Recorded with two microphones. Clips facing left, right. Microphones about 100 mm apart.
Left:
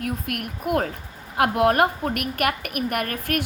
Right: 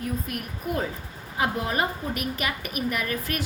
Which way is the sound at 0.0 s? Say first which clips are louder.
Left 3 dB; 65° left (ahead or behind).